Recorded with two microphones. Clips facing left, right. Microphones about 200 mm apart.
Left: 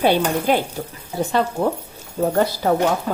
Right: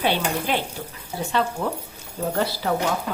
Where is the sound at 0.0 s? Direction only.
45° left (ahead or behind).